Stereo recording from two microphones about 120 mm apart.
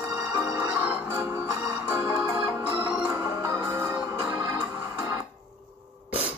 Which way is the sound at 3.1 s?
25° right (ahead or behind).